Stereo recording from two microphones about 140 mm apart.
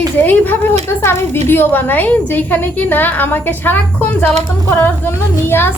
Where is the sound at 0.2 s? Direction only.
15° left (ahead or behind).